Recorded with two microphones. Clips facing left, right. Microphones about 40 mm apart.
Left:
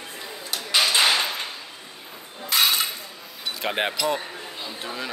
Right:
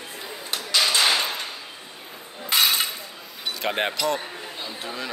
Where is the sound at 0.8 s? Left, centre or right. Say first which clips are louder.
Left 1 dB; centre.